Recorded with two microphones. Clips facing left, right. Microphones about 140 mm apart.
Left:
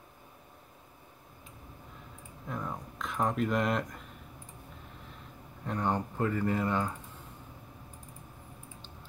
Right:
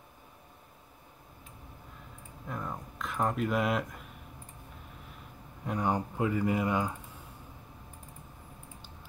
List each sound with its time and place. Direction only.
2.4 s speech: centre (ahead or behind)
5.7 s speech: 10° right (ahead or behind)